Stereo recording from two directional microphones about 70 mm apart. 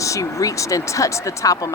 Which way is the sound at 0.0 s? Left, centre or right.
Left.